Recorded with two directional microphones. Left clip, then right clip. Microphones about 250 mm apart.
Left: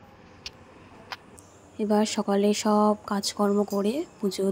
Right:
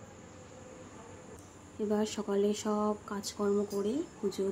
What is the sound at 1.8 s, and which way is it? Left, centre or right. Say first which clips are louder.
Speech: left 8 dB; left.